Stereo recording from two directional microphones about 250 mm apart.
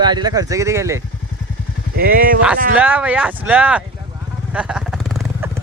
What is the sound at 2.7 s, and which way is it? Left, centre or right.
Speech, centre.